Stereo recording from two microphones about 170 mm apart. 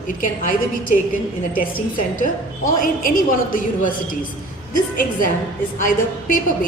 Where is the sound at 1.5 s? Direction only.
55° left (ahead or behind).